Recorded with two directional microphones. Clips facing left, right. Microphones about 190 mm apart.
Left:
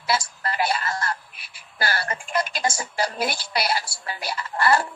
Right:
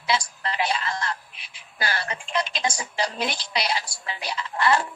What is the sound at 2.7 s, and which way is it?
A woman's voice, 5° left (ahead or behind).